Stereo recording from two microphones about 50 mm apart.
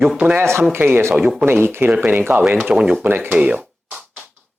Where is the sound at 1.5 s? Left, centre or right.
Right.